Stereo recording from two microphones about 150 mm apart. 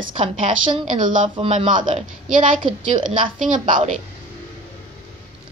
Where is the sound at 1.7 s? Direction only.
55° right (ahead or behind).